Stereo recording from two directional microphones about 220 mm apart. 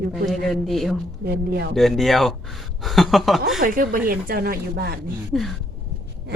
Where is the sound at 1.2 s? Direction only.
45° right (ahead or behind).